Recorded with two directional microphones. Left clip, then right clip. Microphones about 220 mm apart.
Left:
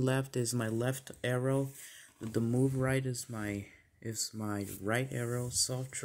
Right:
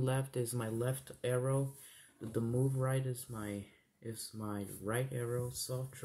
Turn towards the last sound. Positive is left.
turn(degrees=40)  # may be behind; listen again after turning